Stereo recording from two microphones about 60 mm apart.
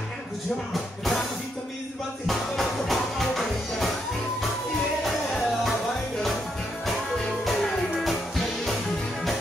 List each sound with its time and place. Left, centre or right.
2.2 s music: centre
7.2 s music: centre